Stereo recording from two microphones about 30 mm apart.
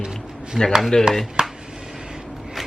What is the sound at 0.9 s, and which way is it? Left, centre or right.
Speech, left.